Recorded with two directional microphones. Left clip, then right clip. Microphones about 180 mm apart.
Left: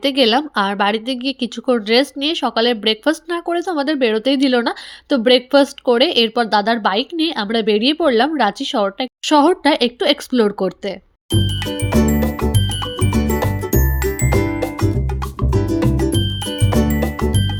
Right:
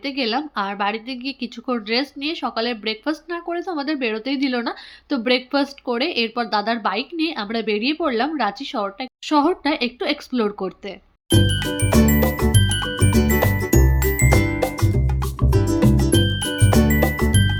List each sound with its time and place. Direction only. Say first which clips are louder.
0.0 s a woman's voice: left 8 dB; 50° left (ahead or behind); by 10.9 s 35° left (ahead or behind)
11.3 s music: right 1 dB; centre (ahead or behind)